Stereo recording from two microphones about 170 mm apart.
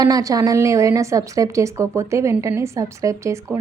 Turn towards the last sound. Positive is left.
turn(degrees=-15)  # may be behind; listen again after turning